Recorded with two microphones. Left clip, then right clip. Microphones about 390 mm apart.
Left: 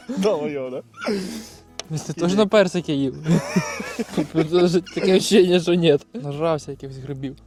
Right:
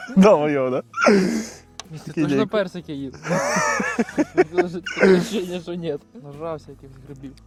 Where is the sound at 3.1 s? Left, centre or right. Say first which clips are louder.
Right 3 dB; right.